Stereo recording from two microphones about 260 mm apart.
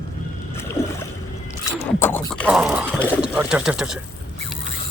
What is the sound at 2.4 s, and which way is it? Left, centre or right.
Speech, centre.